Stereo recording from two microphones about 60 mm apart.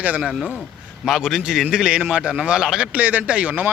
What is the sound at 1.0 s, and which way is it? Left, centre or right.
Speech, centre.